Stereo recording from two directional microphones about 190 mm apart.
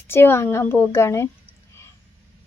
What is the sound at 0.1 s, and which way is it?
A child's voice, 10° left (ahead or behind).